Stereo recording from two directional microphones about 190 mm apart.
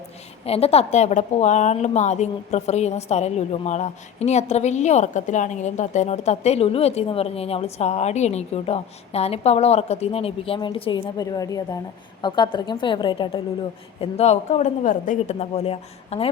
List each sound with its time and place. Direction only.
0.4 s a woman's voice: 30° left (ahead or behind)